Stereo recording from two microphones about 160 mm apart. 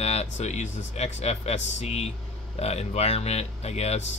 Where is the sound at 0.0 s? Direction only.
40° left (ahead or behind).